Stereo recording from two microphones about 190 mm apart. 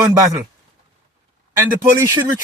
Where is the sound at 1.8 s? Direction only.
20° right (ahead or behind).